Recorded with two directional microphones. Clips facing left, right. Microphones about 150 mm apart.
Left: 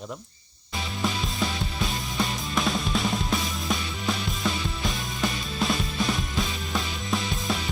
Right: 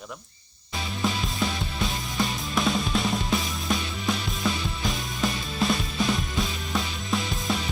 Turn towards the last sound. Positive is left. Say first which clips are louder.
# even
turn(degrees=0)  # may be behind; listen again after turning